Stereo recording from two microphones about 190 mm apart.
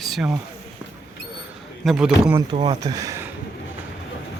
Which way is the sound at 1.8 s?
5° right (ahead or behind).